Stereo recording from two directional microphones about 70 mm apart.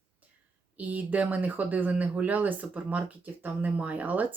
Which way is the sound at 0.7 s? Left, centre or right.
Right.